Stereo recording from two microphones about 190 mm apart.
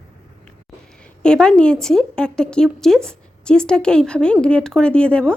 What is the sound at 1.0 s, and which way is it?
A woman's voice, 5° left (ahead or behind).